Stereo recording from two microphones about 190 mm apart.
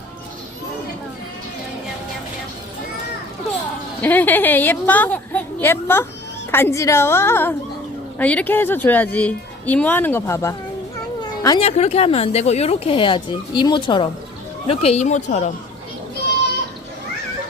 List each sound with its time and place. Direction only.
4.0 s a woman's voice: 10° left (ahead or behind)
11.2 s cat: 20° left (ahead or behind)
11.8 s speech: 35° left (ahead or behind)